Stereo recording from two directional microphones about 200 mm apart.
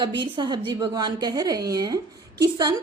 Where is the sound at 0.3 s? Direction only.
25° right (ahead or behind).